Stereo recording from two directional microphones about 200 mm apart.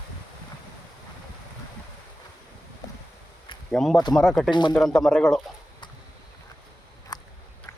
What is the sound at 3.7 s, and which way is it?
Speech, centre (ahead or behind).